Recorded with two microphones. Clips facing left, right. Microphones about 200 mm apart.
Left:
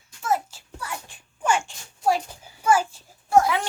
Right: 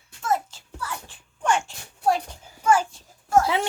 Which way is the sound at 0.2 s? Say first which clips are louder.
Even; 5° left (ahead or behind).